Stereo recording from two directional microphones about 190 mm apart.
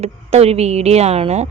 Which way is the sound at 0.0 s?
35° right (ahead or behind).